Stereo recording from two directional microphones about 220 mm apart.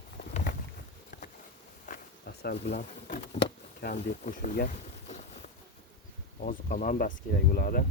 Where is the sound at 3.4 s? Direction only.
45° left (ahead or behind).